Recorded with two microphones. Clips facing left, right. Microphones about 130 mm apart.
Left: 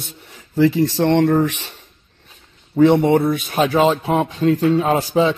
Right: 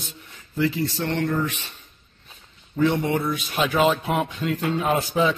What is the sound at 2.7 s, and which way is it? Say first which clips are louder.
Speech: left 9 dB; 65° left (ahead or behind).